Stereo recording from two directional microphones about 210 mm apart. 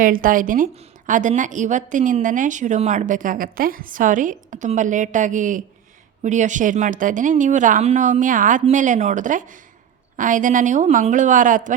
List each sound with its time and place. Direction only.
0.0 s a woman's voice: 40° right (ahead or behind)